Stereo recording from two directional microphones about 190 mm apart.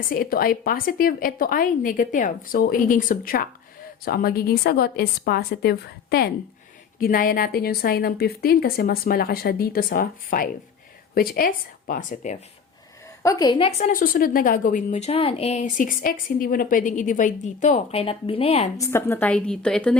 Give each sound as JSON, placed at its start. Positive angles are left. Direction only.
{"t": 0.1, "sound": "a woman's voice", "side_deg": 50}
{"t": 13.2, "sound": "a woman's voice", "side_deg": 20}
{"t": 18.8, "sound": "a woman's voice", "side_deg": 10}